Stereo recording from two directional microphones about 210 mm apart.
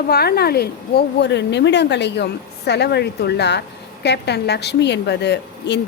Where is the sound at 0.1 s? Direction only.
50° left (ahead or behind).